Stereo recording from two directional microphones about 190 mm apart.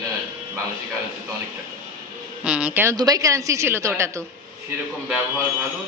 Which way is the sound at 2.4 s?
5° right (ahead or behind).